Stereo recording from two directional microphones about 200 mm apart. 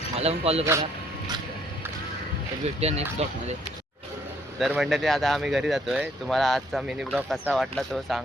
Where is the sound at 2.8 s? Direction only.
30° right (ahead or behind).